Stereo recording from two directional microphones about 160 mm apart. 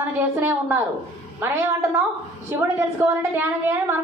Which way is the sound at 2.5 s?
15° right (ahead or behind).